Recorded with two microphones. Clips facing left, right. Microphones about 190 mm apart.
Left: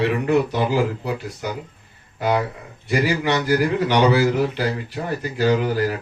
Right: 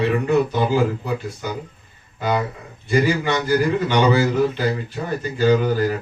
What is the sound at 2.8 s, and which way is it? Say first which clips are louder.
A man's voice: right 1 dB; 80° left.